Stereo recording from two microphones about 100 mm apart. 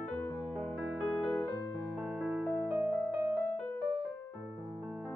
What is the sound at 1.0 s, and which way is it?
Music, 5° right (ahead or behind).